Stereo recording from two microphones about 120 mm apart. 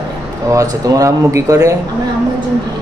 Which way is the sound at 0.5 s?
30° right (ahead or behind).